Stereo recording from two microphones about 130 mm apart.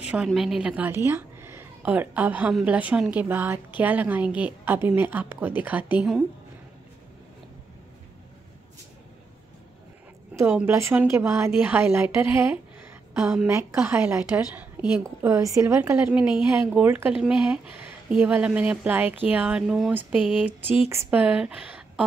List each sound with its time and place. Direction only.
0.0 s speech: 5° right (ahead or behind)
10.3 s a woman's voice: 15° right (ahead or behind)
15.0 s a woman's voice: 25° right (ahead or behind); by 20.5 s 5° right (ahead or behind)
20.9 s a woman's voice: 15° right (ahead or behind)